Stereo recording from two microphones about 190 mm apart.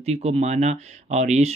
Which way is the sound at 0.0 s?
35° right (ahead or behind).